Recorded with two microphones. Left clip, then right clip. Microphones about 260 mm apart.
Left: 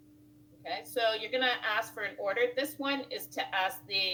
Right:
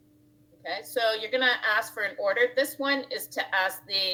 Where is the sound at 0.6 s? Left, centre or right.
Right.